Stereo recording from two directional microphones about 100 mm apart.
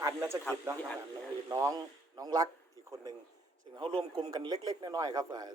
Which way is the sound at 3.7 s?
50° right (ahead or behind).